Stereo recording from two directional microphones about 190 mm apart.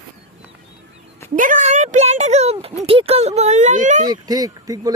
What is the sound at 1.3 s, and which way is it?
Speech, 45° right (ahead or behind).